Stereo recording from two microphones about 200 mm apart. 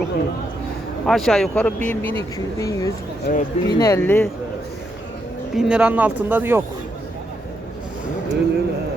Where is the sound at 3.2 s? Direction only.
55° left (ahead or behind).